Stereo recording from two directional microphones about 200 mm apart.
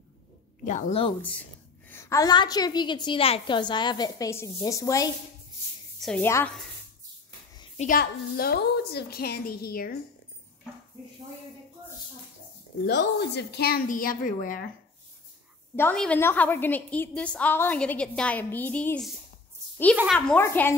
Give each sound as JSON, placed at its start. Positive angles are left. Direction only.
{"t": 0.7, "sound": "a woman's voice", "side_deg": 35}
{"t": 1.9, "sound": "a woman's voice", "side_deg": 15}
{"t": 5.9, "sound": "a woman's voice", "side_deg": 0}
{"t": 6.2, "sound": "a woman's voice", "side_deg": 10}
{"t": 7.5, "sound": "a sound", "side_deg": 25}
{"t": 7.8, "sound": "a woman's voice", "side_deg": 45}
{"t": 12.8, "sound": "a woman's voice", "side_deg": 55}
{"t": 15.7, "sound": "a woman's voice", "side_deg": 10}
{"t": 20.2, "sound": "a woman's voice", "side_deg": 10}